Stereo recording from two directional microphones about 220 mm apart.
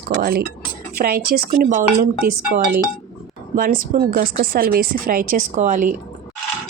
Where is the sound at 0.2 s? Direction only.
45° right (ahead or behind).